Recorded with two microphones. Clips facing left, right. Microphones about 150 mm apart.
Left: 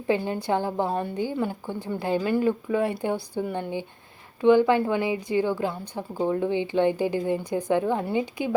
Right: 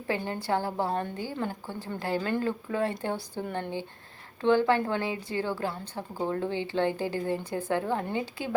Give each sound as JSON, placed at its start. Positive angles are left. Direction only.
{"t": 0.1, "sound": "a woman's voice", "side_deg": 15}